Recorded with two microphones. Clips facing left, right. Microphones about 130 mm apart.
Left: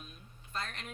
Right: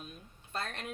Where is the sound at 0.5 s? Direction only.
60° right (ahead or behind).